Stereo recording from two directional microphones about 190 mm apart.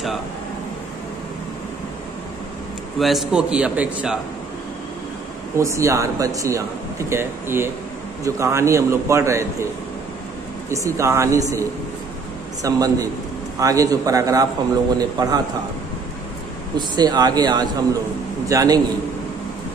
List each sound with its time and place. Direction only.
3.0 s a man's voice: centre (ahead or behind)
5.6 s a man's voice: 15° right (ahead or behind)
10.7 s a man's voice: 15° right (ahead or behind)
12.6 s a man's voice: 20° right (ahead or behind)
16.7 s a man's voice: 20° right (ahead or behind)